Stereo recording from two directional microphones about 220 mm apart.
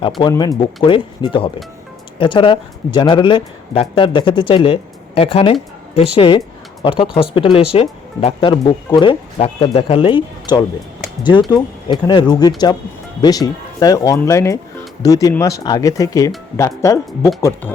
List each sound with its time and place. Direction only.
0.2 s speech: 20° left (ahead or behind)